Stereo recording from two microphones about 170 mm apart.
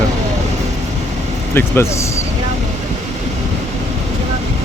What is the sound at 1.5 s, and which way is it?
Speech, 15° left (ahead or behind).